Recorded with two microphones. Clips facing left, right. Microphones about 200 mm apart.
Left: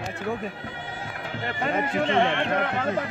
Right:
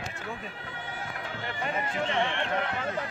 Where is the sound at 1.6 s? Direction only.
80° left.